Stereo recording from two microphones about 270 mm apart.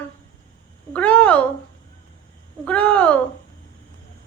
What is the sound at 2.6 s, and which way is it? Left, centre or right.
Speech, centre.